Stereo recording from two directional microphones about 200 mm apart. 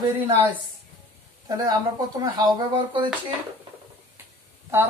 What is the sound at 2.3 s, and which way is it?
Speech, 20° right (ahead or behind).